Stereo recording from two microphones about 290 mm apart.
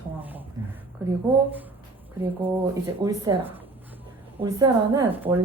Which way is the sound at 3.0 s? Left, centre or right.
Centre.